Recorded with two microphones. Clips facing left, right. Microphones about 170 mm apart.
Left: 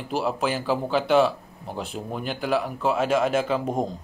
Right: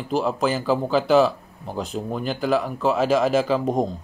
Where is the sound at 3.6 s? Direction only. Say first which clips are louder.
Right 4 dB; 35° right (ahead or behind).